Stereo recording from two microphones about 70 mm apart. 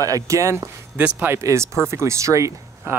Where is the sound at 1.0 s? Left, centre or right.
Right.